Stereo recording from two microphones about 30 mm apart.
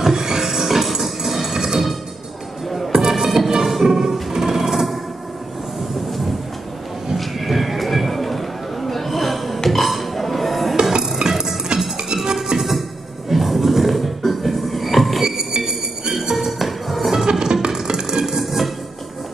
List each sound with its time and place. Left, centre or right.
0.0 s music: centre
6.0 s train: centre
7.2 s horse: centre
9.7 s burping: centre
10.8 s music: right
13.3 s a sound: centre
15.2 s a sound: centre
16.3 s chink: centre
17.3 s music: right
18.4 s music: centre